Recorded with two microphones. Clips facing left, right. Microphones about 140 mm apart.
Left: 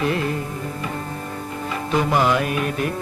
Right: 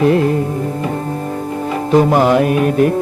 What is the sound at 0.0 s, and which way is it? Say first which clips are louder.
Music: right 10 dB; 40° right (ahead or behind).